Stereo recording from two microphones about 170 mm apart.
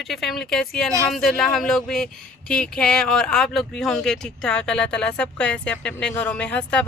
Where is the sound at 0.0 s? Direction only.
Centre (ahead or behind).